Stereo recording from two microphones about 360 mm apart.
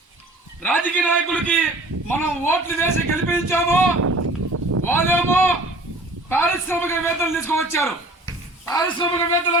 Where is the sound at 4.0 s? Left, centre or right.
Right.